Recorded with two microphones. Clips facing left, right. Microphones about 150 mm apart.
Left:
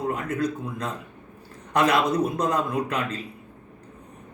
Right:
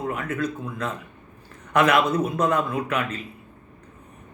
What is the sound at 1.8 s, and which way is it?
Speech, 30° left (ahead or behind).